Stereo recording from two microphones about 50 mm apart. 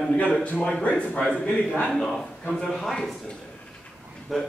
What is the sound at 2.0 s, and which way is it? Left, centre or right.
A man's voice, centre.